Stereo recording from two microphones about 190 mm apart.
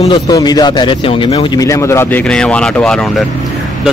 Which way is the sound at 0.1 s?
20° left (ahead or behind).